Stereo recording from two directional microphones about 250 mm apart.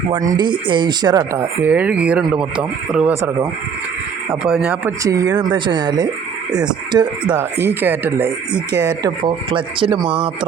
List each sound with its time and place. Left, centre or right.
0.1 s speech: centre